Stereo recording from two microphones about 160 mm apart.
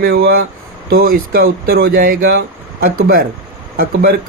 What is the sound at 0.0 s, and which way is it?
Speech, 70° right (ahead or behind).